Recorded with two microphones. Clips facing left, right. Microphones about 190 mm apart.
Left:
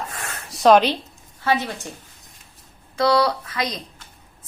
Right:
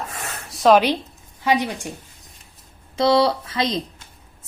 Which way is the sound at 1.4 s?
15° right (ahead or behind).